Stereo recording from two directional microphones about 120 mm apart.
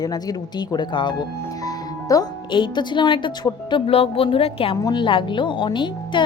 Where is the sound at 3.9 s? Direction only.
50° left (ahead or behind).